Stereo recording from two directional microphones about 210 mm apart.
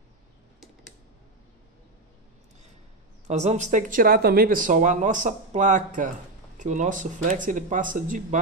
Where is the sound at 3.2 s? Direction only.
35° right (ahead or behind).